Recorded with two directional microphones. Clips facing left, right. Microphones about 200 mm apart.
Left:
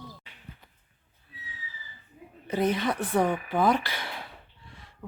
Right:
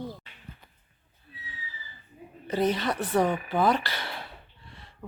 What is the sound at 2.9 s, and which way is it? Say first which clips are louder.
Speech: even; centre (ahead or behind).